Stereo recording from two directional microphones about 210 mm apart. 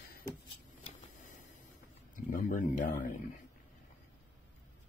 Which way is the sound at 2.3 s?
40° left (ahead or behind).